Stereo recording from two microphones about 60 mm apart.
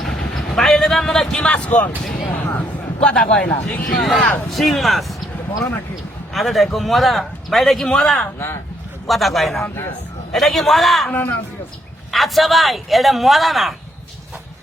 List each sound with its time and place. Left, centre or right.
0.0 s vehicle: centre; by 1.9 s left
2.3 s a sound: left
3.0 s a man's voice: centre
3.4 s speech: left
3.8 s speech: centre
6.3 s speech: centre
7.9 s a man's voice: centre
9.0 s speech: centre
11.1 s speech: left
12.1 s speech: centre